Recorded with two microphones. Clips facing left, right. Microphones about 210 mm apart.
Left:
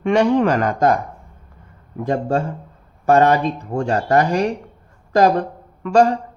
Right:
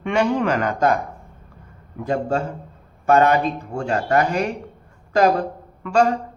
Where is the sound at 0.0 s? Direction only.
40° left (ahead or behind).